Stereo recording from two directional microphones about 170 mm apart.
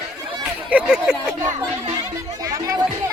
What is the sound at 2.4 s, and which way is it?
Music, 20° right (ahead or behind).